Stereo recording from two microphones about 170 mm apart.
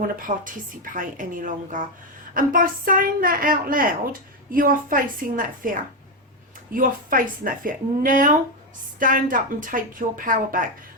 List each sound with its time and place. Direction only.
0.3 s a woman's voice: 50° right (ahead or behind)